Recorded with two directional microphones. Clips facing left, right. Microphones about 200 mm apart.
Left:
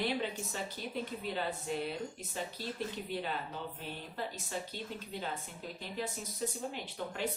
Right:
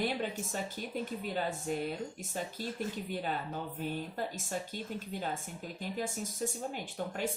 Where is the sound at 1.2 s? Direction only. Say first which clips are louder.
Right 2 dB; 45° right (ahead or behind).